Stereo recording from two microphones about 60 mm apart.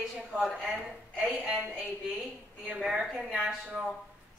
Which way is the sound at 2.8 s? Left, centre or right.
Centre.